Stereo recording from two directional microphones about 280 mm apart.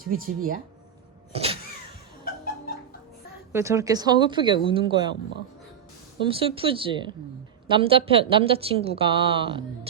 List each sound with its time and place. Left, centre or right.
0.0 s speech: right
1.3 s a sound: right
2.2 s music: left
3.5 s speech: centre
6.2 s a woman's voice: centre